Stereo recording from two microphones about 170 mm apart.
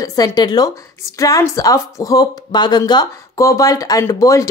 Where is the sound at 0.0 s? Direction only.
20° left (ahead or behind).